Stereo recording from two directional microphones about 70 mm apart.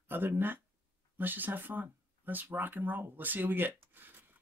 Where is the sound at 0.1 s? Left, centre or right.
Right.